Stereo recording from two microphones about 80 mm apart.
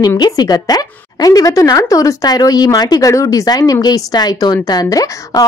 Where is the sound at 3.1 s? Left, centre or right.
Left.